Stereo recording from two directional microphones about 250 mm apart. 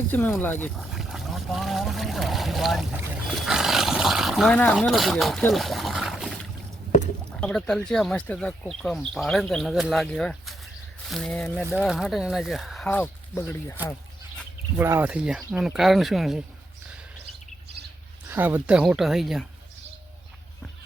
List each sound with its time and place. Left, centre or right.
0.1 s speech: centre
14.8 s speech: centre
18.3 s speech: centre